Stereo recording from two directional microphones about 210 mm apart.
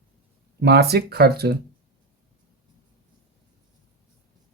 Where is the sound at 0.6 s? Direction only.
50° right (ahead or behind).